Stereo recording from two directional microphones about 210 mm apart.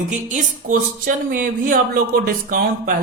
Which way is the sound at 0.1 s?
35° right (ahead or behind).